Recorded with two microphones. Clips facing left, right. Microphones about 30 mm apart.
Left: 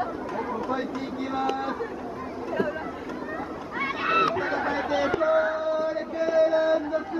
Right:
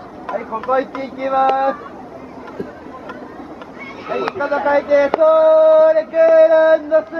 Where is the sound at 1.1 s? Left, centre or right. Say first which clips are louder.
Right 14 dB; right.